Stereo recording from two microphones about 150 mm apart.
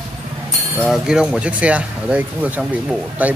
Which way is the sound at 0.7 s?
Centre (ahead or behind).